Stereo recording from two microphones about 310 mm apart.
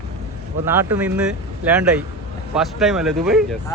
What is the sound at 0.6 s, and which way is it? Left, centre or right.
A man's voice, centre.